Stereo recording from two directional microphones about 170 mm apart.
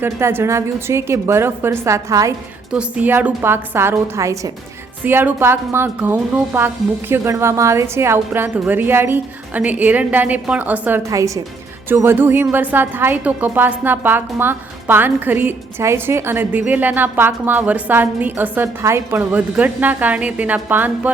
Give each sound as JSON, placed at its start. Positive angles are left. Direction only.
{"t": 0.0, "sound": "a woman's voice", "side_deg": -15}